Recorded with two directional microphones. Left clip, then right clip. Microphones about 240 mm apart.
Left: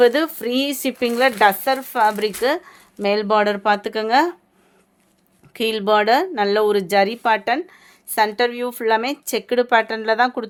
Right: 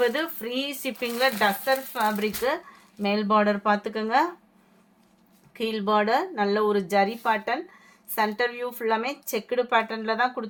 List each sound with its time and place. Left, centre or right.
0.0 s speech: left
5.5 s speech: left